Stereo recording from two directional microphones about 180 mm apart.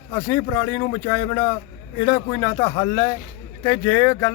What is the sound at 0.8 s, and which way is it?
Speech, 20° left (ahead or behind).